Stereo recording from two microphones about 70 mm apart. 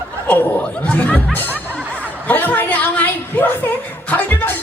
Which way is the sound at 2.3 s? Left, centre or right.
Left.